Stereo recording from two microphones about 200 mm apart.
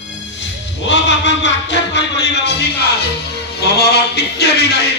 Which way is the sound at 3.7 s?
55° left (ahead or behind).